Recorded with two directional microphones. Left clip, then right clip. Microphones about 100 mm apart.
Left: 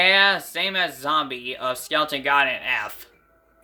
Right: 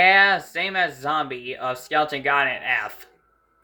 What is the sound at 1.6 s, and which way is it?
Speech, 85° left.